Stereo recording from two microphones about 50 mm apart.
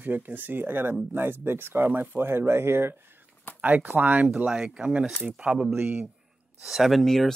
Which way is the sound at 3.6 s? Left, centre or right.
Right.